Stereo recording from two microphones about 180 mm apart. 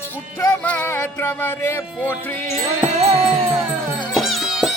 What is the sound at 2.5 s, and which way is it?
Music, 40° right (ahead or behind).